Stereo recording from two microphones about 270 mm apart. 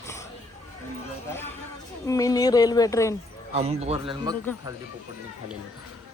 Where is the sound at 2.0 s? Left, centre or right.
Centre.